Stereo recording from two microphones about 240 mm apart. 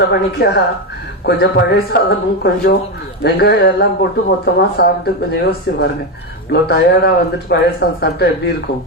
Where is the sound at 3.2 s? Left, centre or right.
Left.